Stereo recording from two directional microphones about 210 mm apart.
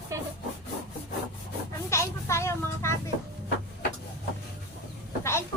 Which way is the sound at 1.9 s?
15° left (ahead or behind).